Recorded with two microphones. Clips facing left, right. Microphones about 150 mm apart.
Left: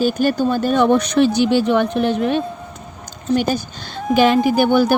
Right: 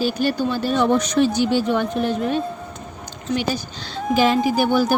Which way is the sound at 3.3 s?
55° left (ahead or behind).